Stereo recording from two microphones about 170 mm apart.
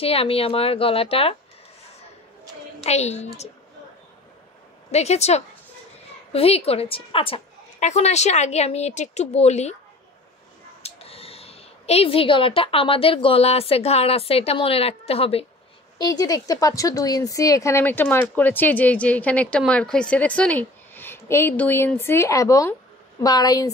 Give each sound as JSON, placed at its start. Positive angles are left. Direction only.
{"t": 0.0, "sound": "a woman's voice", "side_deg": 35}
{"t": 2.8, "sound": "a woman's voice", "side_deg": 40}
{"t": 4.9, "sound": "a woman's voice", "side_deg": 40}
{"t": 10.8, "sound": "speech", "side_deg": 35}
{"t": 16.0, "sound": "a woman's voice", "side_deg": 20}